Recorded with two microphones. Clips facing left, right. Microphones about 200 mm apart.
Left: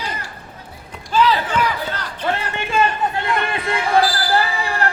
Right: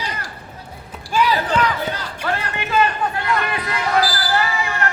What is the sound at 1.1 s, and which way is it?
Basketball bounce, 10° right (ahead or behind).